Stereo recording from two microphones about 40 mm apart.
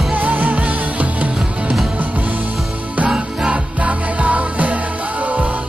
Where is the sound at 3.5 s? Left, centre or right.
Right.